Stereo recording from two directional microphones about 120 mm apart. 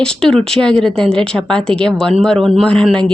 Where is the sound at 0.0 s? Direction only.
5° left (ahead or behind).